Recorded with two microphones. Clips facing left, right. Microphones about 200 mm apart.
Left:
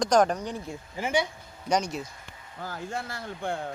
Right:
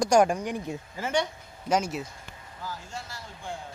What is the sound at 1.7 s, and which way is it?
Speech, 5° right (ahead or behind).